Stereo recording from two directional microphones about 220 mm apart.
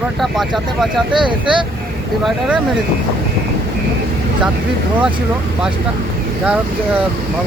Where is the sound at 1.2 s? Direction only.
20° right (ahead or behind).